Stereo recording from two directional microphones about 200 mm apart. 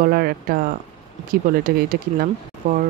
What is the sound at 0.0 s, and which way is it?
Speech, 50° right (ahead or behind).